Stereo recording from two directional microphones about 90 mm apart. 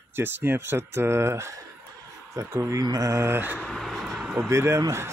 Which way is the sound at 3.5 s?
5° left (ahead or behind).